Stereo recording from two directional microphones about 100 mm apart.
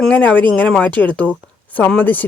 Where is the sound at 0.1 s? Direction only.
15° left (ahead or behind).